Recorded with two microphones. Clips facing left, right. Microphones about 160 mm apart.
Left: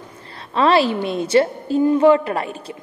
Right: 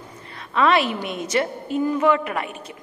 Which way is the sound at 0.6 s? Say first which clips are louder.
Left 3 dB; 30° left (ahead or behind).